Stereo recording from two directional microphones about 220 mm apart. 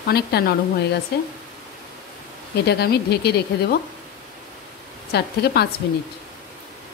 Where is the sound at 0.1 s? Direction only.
45° left (ahead or behind).